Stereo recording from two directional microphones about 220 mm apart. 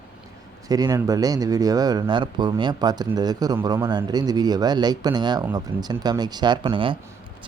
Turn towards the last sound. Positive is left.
turn(degrees=-20)  # may be behind; listen again after turning